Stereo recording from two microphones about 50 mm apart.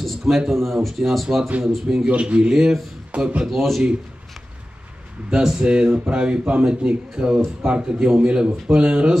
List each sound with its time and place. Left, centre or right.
0.0 s speech: centre
2.0 s speech: right
2.5 s speech: centre
3.1 s speech: right
3.4 s speech: centre
5.3 s speech: centre